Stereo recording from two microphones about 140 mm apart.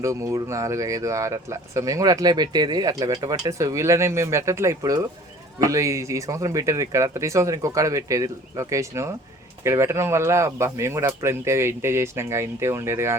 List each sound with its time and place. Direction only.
0.0 s speech: 20° right (ahead or behind)